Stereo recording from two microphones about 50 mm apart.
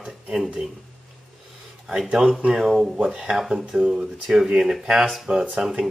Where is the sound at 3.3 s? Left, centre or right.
Centre; by 5.4 s right.